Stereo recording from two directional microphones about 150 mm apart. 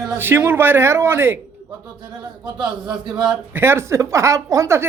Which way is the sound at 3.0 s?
30° right (ahead or behind).